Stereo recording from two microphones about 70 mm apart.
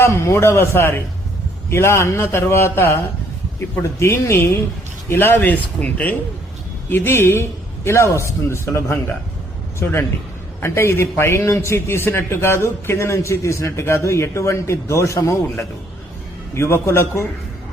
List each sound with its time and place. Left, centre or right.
0.0 s a man's voice: left
6.9 s a man's voice: left
16.6 s a man's voice: left